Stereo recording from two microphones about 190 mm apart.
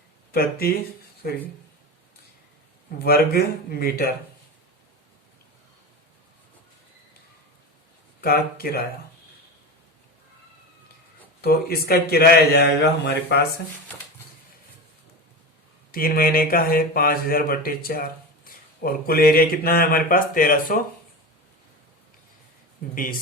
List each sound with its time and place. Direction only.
0.3 s speech: 55° left (ahead or behind)
3.0 s speech: 55° left (ahead or behind)
8.2 s speech: 50° left (ahead or behind)
11.3 s a man's voice: 55° left (ahead or behind)
15.9 s speech: 50° left (ahead or behind)